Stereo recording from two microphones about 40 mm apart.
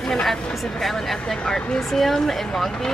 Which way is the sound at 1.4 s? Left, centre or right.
Left.